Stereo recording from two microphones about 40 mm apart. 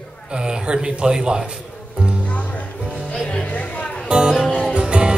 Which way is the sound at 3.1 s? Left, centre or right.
Centre.